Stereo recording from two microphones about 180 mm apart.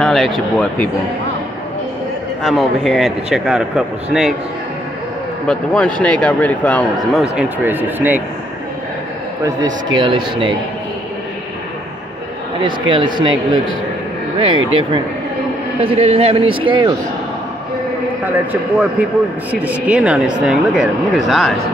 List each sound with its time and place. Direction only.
0.0 s a man's voice: centre (ahead or behind)
2.4 s a man's voice: centre (ahead or behind)
5.5 s a man's voice: 5° left (ahead or behind)
7.3 s speech: 10° right (ahead or behind)
9.9 s speech: 25° right (ahead or behind)
12.6 s speech: 25° right (ahead or behind)
18.5 s a man's voice: 5° right (ahead or behind)